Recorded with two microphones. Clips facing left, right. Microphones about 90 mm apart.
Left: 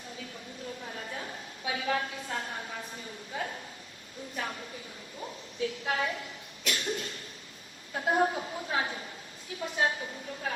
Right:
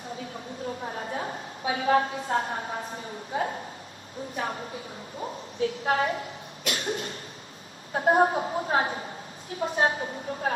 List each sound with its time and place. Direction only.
0.8 s a sound: 40° right (ahead or behind)
4.4 s a woman's voice: 40° right (ahead or behind)
6.7 s cough: 45° right (ahead or behind)
7.9 s a woman's voice: 40° right (ahead or behind)